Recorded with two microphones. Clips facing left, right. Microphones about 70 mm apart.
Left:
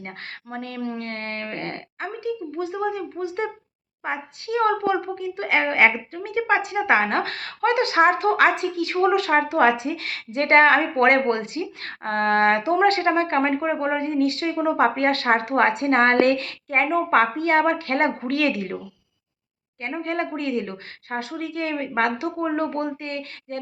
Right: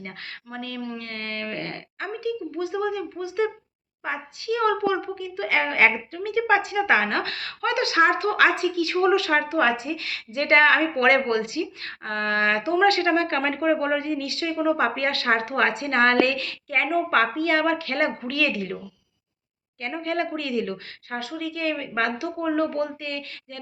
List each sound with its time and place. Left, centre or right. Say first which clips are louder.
0.5 s a woman's voice: left 3 dB; left
6.3 s a woman's voice: even; left
12.8 s a woman's voice: right 2 dB; left
20.0 s speech: even; left
21.2 s a woman's voice: left 1 dB; left